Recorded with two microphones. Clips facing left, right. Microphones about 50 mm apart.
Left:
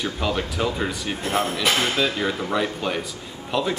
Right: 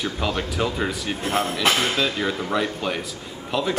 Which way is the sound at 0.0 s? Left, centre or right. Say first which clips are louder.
Even; centre.